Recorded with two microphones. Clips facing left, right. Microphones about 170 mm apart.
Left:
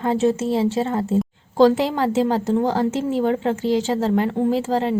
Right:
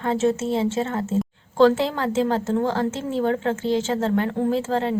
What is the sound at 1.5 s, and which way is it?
A woman's voice, 15° left (ahead or behind).